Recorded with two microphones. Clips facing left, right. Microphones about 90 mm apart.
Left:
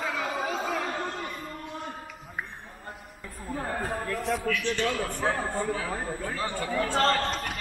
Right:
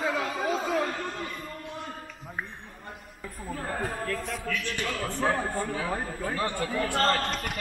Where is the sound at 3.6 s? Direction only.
5° left (ahead or behind).